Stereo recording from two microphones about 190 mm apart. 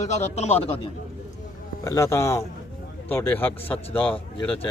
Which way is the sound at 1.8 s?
15° left (ahead or behind).